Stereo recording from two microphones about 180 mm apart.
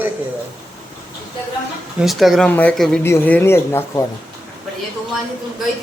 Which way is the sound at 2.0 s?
Centre (ahead or behind).